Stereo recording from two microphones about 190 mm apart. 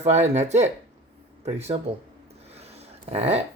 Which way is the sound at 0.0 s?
35° right (ahead or behind).